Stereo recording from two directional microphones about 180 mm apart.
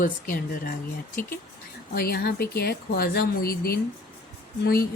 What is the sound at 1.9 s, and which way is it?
A woman's voice, 55° left (ahead or behind).